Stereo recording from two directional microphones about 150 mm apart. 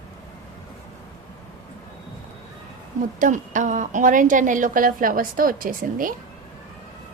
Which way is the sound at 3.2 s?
60° right (ahead or behind).